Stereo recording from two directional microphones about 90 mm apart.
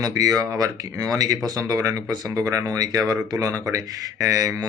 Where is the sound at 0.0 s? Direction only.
40° right (ahead or behind).